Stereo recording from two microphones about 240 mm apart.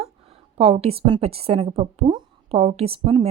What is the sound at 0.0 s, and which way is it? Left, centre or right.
A woman's voice, right.